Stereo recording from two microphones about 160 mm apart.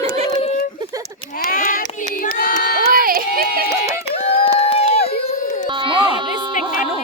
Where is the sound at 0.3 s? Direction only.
35° left (ahead or behind).